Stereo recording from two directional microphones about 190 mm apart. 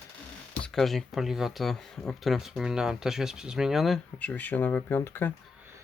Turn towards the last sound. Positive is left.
turn(degrees=10)  # may be behind; listen again after turning